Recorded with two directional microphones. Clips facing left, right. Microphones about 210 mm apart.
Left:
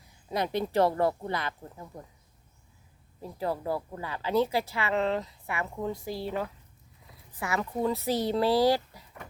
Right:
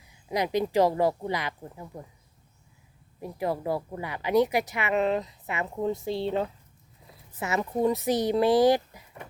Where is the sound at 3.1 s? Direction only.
15° right (ahead or behind).